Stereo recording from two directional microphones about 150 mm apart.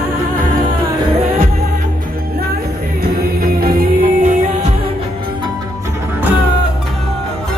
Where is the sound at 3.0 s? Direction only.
90° right; by 4.3 s 75° right (ahead or behind).